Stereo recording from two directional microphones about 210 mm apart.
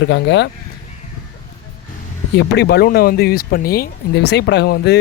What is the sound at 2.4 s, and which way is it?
Speech, 50° left (ahead or behind).